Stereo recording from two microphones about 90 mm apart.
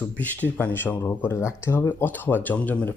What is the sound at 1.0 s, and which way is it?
Speech, 30° left (ahead or behind).